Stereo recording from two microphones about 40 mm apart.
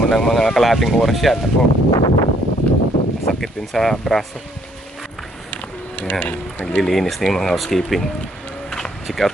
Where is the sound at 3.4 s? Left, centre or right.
Centre.